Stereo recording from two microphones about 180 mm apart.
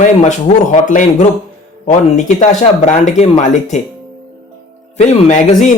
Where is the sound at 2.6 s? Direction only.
40° left (ahead or behind).